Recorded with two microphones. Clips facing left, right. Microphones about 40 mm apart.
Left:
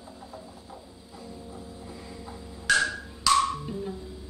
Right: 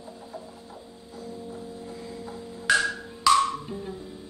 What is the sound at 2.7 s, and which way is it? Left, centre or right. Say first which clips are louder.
Wood block: right 1 dB; centre.